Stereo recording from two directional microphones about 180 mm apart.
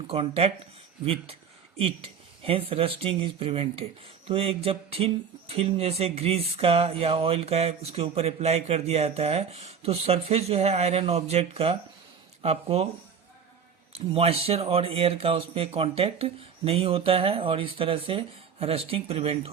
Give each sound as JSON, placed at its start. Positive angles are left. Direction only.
{"t": 0.1, "sound": "speech", "side_deg": -30}
{"t": 2.4, "sound": "speech", "side_deg": -30}
{"t": 14.1, "sound": "speech", "side_deg": -35}